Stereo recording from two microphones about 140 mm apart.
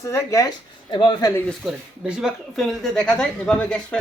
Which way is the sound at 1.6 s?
5° right (ahead or behind).